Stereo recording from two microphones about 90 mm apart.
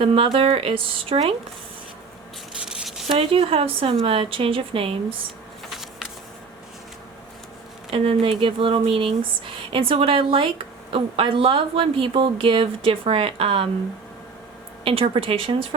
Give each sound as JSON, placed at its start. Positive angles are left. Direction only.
{"t": 0.0, "sound": "speech", "side_deg": -90}
{"t": 2.6, "sound": "a sound", "side_deg": -5}
{"t": 3.2, "sound": "speech", "side_deg": -90}
{"t": 5.7, "sound": "a sound", "side_deg": -5}
{"t": 7.9, "sound": "speech", "side_deg": -90}
{"t": 14.8, "sound": "speech", "side_deg": -90}